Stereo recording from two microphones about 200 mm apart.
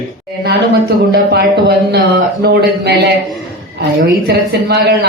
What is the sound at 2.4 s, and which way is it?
A man's voice, 50° right (ahead or behind).